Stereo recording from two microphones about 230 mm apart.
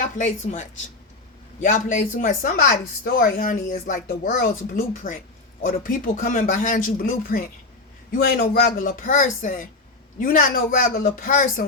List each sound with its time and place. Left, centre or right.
0.2 s speech: left
1.6 s speech: left
6.1 s speech: left